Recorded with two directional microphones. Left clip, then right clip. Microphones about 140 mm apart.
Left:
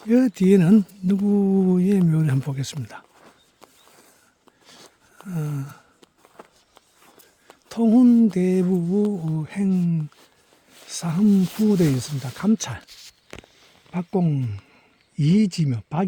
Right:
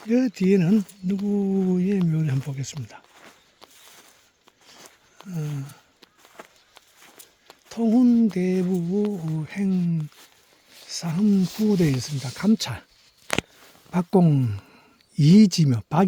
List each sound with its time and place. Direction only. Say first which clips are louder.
0.1 s speech: left 3 dB; 25° left (ahead or behind); by 3.1 s 45° left (ahead or behind)
5.1 s speech: left 3 dB; 30° left (ahead or behind)
6.4 s walk: right 1 dB; 15° right (ahead or behind)
7.7 s speech: left 3 dB; 30° left (ahead or behind)
10.9 s speech: left 2 dB; 20° left (ahead or behind)
11.5 s speech: left 2 dB; 10° left (ahead or behind)
12.2 s speech: right 1 dB; centre (ahead or behind)
13.9 s speech: right 4 dB; 45° right (ahead or behind)